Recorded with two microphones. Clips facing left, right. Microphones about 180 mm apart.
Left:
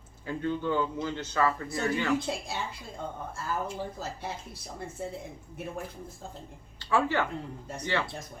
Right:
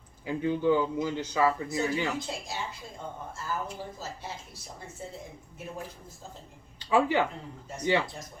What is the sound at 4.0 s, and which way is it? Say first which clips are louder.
Speech: left 3 dB; 60° left (ahead or behind).